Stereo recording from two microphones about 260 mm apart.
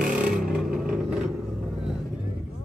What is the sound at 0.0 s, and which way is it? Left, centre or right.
Vehicle, centre.